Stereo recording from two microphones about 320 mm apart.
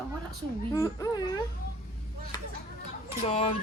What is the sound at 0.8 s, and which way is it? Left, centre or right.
Speech, centre.